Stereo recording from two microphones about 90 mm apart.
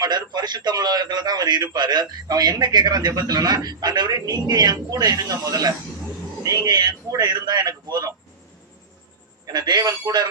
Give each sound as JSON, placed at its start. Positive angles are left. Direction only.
{"t": 0.0, "sound": "a man's voice", "side_deg": -50}
{"t": 9.5, "sound": "a man's voice", "side_deg": -45}